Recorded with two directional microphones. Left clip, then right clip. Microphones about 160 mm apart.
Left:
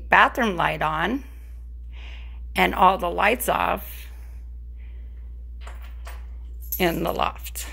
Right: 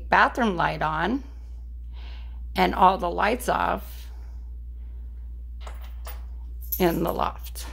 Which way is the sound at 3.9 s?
15° right (ahead or behind).